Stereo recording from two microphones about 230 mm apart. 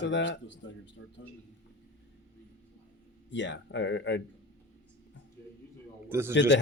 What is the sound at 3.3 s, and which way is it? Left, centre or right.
Speech, left.